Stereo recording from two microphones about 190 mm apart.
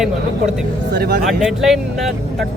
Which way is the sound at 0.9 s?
55° right (ahead or behind).